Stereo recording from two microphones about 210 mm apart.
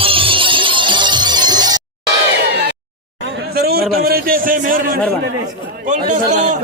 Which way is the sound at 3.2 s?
50° right (ahead or behind).